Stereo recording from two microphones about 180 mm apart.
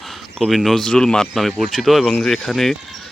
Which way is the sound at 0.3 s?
Centre (ahead or behind).